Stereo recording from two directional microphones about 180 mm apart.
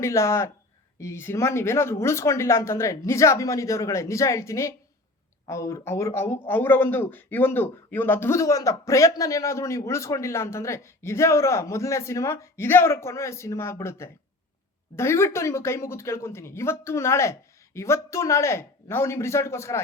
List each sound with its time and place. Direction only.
0.0 s speech: 15° left (ahead or behind)